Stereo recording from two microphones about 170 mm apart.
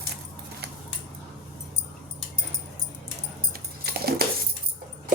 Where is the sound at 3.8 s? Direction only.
70° right (ahead or behind).